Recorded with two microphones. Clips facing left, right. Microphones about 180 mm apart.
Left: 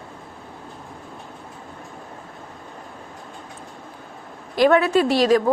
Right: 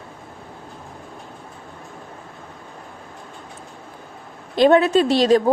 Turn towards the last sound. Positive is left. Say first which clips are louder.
# right 2 dB
turn(degrees=-25)  # may be behind; listen again after turning